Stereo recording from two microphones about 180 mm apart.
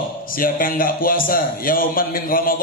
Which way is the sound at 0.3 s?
50° left (ahead or behind).